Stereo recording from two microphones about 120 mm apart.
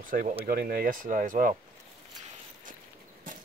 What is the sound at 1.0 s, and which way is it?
Speech, 90° right.